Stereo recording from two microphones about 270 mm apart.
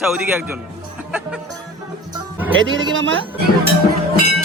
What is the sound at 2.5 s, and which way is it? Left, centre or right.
Speech, right.